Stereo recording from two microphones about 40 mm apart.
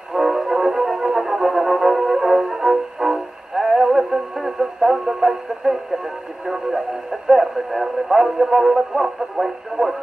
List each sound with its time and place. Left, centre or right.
0.1 s music: centre
4.6 s radio: centre
5.6 s speech: right